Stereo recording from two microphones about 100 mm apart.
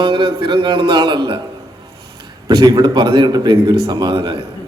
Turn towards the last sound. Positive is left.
turn(degrees=-45)  # may be behind; listen again after turning